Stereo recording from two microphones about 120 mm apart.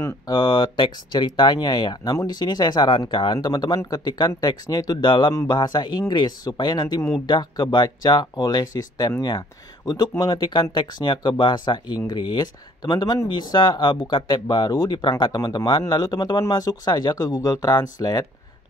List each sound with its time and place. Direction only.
0.3 s speech: 40° left (ahead or behind)
5.3 s speech: 30° left (ahead or behind)